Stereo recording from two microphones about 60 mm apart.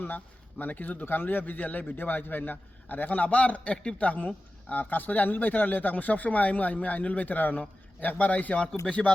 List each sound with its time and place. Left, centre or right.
0.6 s speech: left